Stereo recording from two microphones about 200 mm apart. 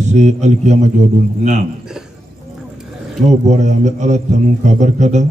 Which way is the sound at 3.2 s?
35° right (ahead or behind).